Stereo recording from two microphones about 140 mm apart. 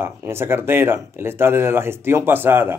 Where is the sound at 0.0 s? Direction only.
15° right (ahead or behind).